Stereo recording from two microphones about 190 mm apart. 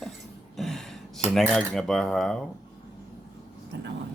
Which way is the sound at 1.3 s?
Centre (ahead or behind).